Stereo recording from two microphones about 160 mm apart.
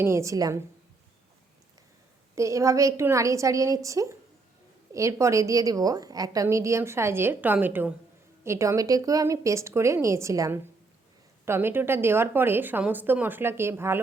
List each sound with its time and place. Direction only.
0.0 s a woman's voice: 20° right (ahead or behind)
2.3 s a woman's voice: 20° right (ahead or behind)